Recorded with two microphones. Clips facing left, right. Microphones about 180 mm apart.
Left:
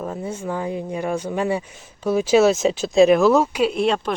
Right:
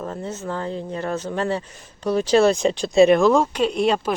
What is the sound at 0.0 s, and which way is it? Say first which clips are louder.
Speech: left 2 dB; 10° left (ahead or behind).